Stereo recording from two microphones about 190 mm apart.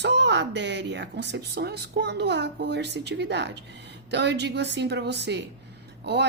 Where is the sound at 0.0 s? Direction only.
65° right (ahead or behind).